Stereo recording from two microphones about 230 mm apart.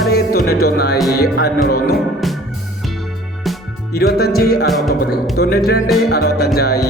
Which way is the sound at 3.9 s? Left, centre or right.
Left.